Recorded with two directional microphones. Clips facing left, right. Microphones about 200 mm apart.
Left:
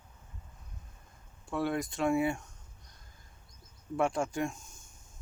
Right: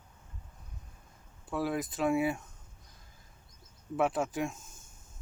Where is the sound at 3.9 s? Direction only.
5° right (ahead or behind).